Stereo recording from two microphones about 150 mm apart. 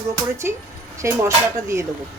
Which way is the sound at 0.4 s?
15° right (ahead or behind).